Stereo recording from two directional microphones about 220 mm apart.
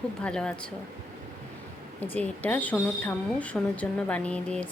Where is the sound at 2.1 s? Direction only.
5° left (ahead or behind).